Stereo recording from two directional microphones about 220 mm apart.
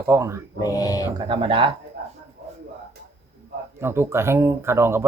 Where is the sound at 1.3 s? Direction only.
25° right (ahead or behind).